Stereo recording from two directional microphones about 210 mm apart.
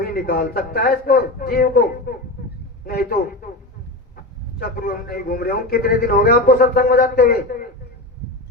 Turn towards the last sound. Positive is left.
turn(degrees=45)  # may be behind; listen again after turning